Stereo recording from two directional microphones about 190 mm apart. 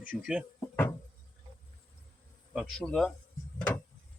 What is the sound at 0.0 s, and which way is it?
Speech, 5° right (ahead or behind).